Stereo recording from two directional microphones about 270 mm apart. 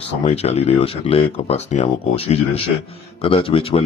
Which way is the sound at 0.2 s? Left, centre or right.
Left.